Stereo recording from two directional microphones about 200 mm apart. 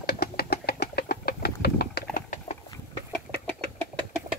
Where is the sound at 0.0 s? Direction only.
50° left (ahead or behind).